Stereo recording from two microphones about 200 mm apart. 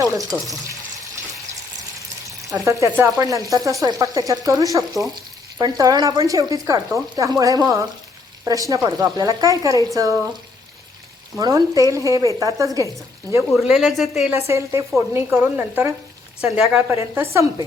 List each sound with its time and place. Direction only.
0.0 s speech: 15° right (ahead or behind)
2.5 s speech: 15° right (ahead or behind)
11.3 s speech: 15° right (ahead or behind)
13.5 s a woman's voice: centre (ahead or behind)
14.3 s a woman's voice: 15° right (ahead or behind)
16.9 s speech: 15° right (ahead or behind)